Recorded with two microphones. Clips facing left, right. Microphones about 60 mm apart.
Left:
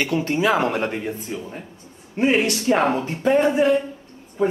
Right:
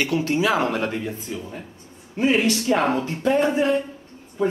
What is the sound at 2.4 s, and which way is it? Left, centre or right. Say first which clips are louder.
Speech: left 1 dB; centre.